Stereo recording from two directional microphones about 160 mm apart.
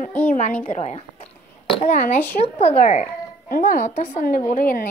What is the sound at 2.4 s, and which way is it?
Speech, 40° left (ahead or behind).